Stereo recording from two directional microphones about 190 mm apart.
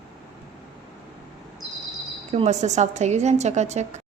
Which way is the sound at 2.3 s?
35° right (ahead or behind).